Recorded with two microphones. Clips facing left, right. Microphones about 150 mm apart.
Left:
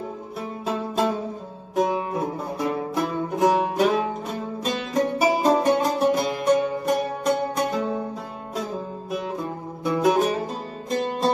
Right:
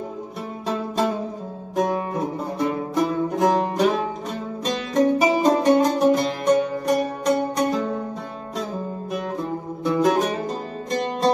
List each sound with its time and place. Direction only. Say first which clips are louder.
1.8 s music: even; 5° left (ahead or behind)
9.8 s music: even; 5° left (ahead or behind)